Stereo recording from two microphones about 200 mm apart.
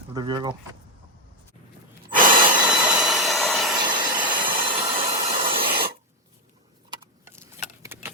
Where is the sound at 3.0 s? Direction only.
Centre (ahead or behind).